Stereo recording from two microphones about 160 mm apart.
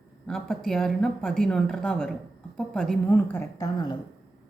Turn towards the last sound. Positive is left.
turn(degrees=25)  # may be behind; listen again after turning